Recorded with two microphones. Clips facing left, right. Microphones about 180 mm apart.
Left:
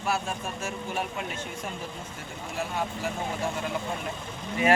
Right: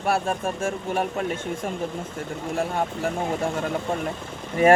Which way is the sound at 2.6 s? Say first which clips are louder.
Right 5 dB; 50° right (ahead or behind).